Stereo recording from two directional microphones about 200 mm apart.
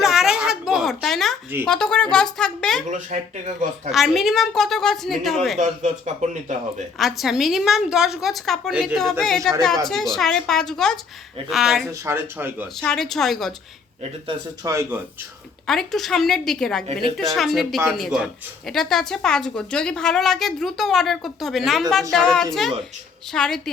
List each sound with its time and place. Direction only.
0.0 s a sound: centre (ahead or behind)
1.6 s a woman's voice: 5° left (ahead or behind)
2.9 s speech: 35° right (ahead or behind)
3.9 s a woman's voice: centre (ahead or behind)
5.5 s speech: 35° right (ahead or behind)
7.0 s a woman's voice: centre (ahead or behind)
11.9 s speech: 10° right (ahead or behind)
12.8 s a woman's voice: 5° left (ahead or behind)
14.3 s speech: 15° right (ahead or behind)
15.6 s a woman's voice: centre (ahead or behind)